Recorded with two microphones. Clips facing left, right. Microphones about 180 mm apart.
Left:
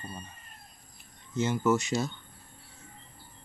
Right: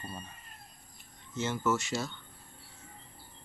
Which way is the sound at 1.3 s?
15° left (ahead or behind).